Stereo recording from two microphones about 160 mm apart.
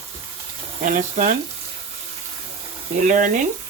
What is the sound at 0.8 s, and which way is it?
Speech, 55° right (ahead or behind).